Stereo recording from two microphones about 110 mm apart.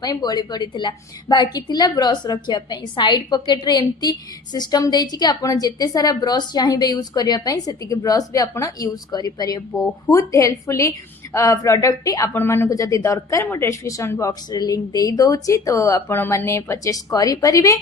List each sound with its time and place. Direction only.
0.0 s a woman's voice: 40° left (ahead or behind)